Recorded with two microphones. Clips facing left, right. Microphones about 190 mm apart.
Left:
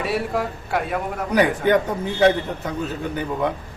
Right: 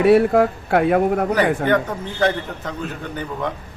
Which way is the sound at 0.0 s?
55° right (ahead or behind).